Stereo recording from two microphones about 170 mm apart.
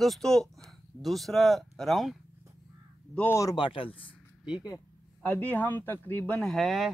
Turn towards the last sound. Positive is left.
turn(degrees=0)  # may be behind; listen again after turning